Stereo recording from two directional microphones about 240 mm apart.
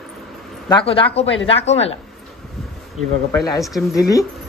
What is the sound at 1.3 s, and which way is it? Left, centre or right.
Speech, left.